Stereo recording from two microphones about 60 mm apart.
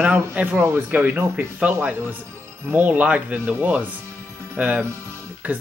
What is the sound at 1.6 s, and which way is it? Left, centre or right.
Speech, right.